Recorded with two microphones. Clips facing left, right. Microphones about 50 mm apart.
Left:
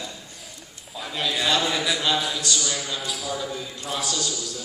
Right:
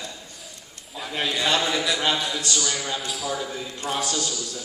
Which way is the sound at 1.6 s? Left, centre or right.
Centre.